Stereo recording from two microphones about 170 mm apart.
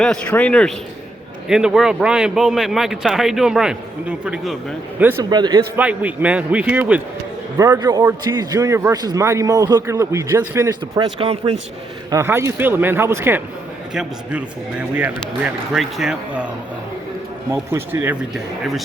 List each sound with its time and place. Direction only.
0.0 s speech: 5° left (ahead or behind)
5.3 s a man's voice: 25° right (ahead or behind)
5.7 s speech: 10° right (ahead or behind)
7.6 s a man's voice: 20° right (ahead or behind); by 11.6 s 35° right (ahead or behind)
12.1 s speech: 15° right (ahead or behind)
17.5 s speech: 15° right (ahead or behind)